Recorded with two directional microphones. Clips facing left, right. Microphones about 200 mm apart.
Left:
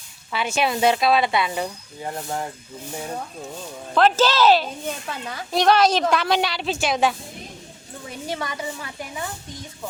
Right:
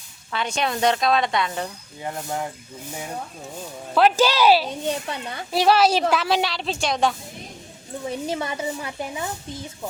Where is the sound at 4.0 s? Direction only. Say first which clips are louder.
Even; 10° right (ahead or behind); by 7.1 s 5° left (ahead or behind).